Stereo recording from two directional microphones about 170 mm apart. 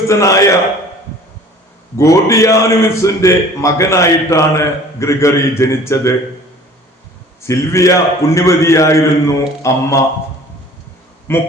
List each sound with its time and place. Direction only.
0.1 s a man's voice: 20° left (ahead or behind)
2.0 s a man's voice: 20° left (ahead or behind)
7.4 s a man's voice: 15° left (ahead or behind)
11.3 s a man's voice: 15° left (ahead or behind)